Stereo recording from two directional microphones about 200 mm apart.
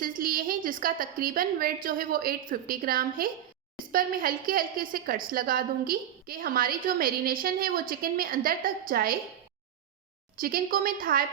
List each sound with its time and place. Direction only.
0.0 s a woman's voice: 45° right (ahead or behind)
10.4 s a woman's voice: 45° right (ahead or behind)